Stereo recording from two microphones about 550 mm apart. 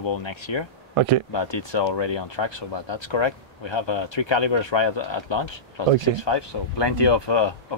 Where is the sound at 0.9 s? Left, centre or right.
Right.